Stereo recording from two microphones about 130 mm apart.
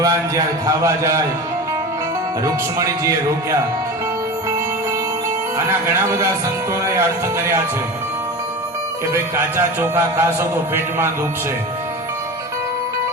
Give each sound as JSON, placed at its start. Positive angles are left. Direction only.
{"t": 0.0, "sound": "speech", "side_deg": -25}
{"t": 2.4, "sound": "speech", "side_deg": -25}
{"t": 5.5, "sound": "speech", "side_deg": -20}
{"t": 9.1, "sound": "a man's voice", "side_deg": -20}